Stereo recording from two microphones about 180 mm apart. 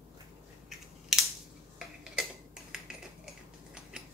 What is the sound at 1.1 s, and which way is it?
Scissors, centre (ahead or behind).